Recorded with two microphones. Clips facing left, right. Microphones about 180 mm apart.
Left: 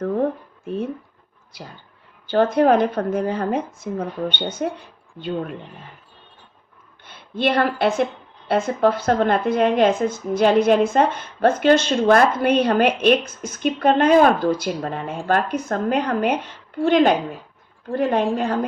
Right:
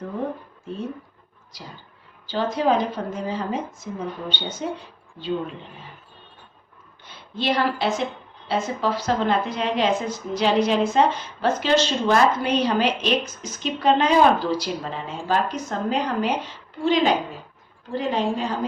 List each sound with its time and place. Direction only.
2.2 s speech: 55° left (ahead or behind)
7.0 s a woman's voice: 55° left (ahead or behind)